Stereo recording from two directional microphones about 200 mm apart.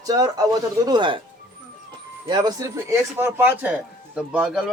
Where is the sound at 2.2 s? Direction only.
20° right (ahead or behind); by 4.7 s 5° right (ahead or behind).